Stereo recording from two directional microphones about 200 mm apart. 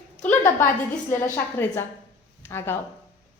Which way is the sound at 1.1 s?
10° left (ahead or behind).